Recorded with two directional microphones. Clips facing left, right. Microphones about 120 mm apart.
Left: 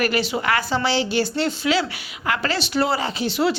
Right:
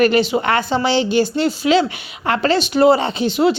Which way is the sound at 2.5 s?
20° right (ahead or behind).